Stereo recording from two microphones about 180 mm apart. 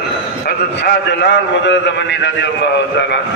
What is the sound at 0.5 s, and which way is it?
A man's voice, 65° left (ahead or behind).